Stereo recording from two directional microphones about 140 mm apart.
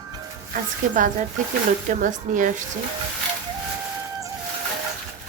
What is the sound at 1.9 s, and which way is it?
Speech, 65° right (ahead or behind).